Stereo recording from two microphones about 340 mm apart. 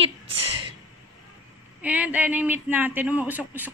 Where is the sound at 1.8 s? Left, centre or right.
Centre.